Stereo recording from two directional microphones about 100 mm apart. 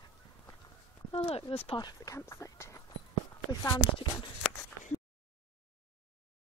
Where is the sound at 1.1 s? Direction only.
70° left (ahead or behind).